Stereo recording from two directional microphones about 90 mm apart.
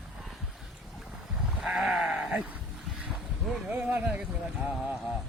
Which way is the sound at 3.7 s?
15° right (ahead or behind).